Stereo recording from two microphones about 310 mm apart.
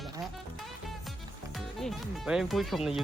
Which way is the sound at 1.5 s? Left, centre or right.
Centre.